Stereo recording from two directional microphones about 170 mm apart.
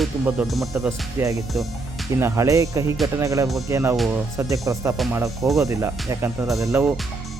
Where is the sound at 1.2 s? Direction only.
20° right (ahead or behind).